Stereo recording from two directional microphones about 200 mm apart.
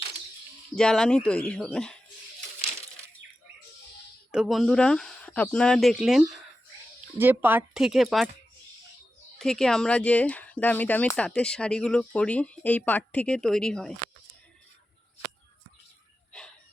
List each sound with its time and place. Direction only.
0.8 s speech: 5° left (ahead or behind)
4.3 s speech: centre (ahead or behind)
9.4 s speech: centre (ahead or behind)